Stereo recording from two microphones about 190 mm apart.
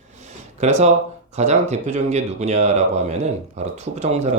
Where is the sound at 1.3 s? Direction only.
35° right (ahead or behind).